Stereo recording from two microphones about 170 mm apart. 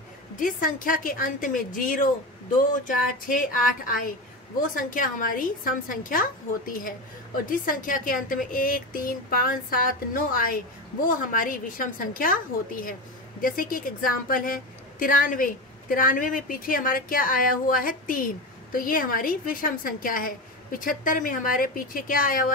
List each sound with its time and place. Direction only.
0.4 s a woman's voice: 50° left (ahead or behind)
7.4 s a woman's voice: 55° left (ahead or behind)